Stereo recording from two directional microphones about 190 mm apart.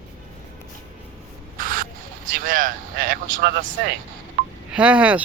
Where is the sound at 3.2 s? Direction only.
75° right (ahead or behind).